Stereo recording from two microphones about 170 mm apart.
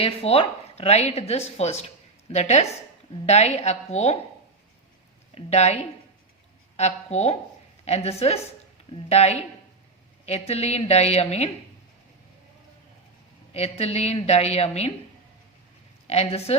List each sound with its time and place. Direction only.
0.0 s a woman's voice: 35° left (ahead or behind)
5.3 s a woman's voice: 40° left (ahead or behind)
13.5 s a woman's voice: 35° left (ahead or behind)
16.0 s a woman's voice: 40° left (ahead or behind)